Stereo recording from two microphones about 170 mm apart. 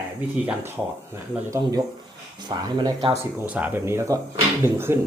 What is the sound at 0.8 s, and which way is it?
Speech, 5° right (ahead or behind).